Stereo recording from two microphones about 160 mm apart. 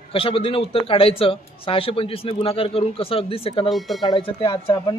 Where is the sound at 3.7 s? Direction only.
Centre (ahead or behind).